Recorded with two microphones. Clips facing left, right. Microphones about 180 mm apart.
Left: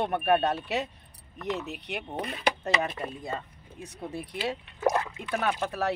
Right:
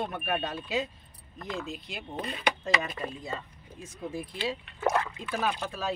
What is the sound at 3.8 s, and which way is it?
Speech, 65° left (ahead or behind).